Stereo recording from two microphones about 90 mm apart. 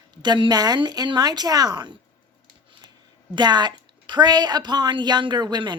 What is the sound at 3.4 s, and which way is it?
A woman's voice, 55° right (ahead or behind).